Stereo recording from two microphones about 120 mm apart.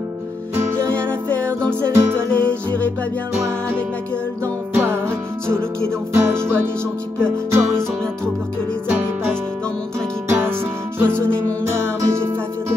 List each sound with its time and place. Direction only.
0.6 s music: 20° right (ahead or behind)
1.6 s music: 10° left (ahead or behind)
2.0 s music: 20° right (ahead or behind)
2.3 s music: 10° left (ahead or behind)
4.7 s music: 20° right (ahead or behind)
7.5 s music: 20° right (ahead or behind)
10.2 s music: 20° right (ahead or behind)